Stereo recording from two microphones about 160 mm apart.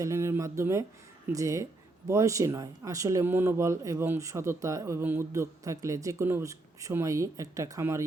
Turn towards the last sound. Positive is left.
turn(degrees=-20)  # may be behind; listen again after turning